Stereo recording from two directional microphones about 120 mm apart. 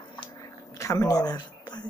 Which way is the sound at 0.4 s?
25° left (ahead or behind).